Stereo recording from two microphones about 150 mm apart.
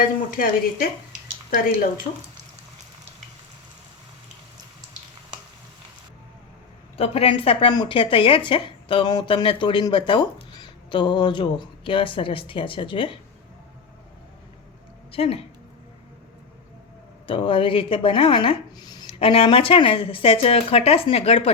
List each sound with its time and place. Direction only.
0.3 s speech: 65° left (ahead or behind)
6.9 s speech: 40° left (ahead or behind)
15.1 s speech: 40° left (ahead or behind)
17.2 s speech: 35° left (ahead or behind)